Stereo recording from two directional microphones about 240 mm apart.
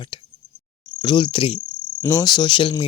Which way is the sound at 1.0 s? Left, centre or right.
Centre.